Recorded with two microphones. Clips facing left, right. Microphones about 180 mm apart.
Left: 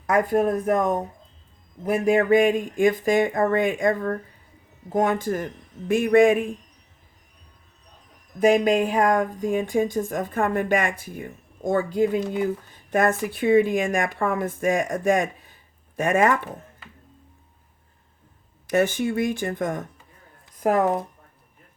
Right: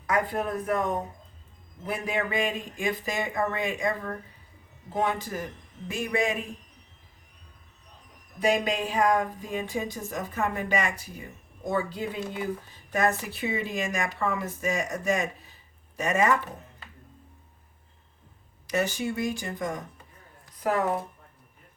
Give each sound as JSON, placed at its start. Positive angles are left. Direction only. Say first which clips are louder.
{"t": 0.1, "sound": "speech", "louder": "left 7 dB", "side_deg": 45}
{"t": 8.4, "sound": "speech", "louder": "left 7 dB", "side_deg": 50}
{"t": 18.7, "sound": "speech", "louder": "left 6 dB", "side_deg": 55}
{"t": 20.6, "sound": "speech", "louder": "left 6 dB", "side_deg": 45}